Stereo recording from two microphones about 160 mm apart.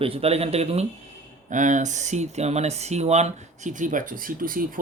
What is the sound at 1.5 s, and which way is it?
Speech, 50° right (ahead or behind).